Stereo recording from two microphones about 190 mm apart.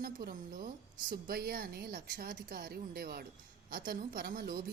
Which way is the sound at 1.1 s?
55° right (ahead or behind).